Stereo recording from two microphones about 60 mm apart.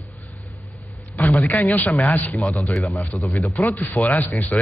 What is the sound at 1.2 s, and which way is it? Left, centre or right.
A man's voice, left.